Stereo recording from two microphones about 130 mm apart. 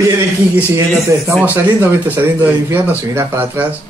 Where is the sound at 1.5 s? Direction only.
15° right (ahead or behind).